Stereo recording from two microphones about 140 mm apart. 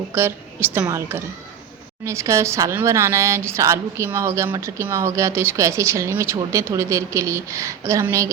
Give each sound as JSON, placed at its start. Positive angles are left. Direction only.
{"t": 0.1, "sound": "a woman's voice", "side_deg": -15}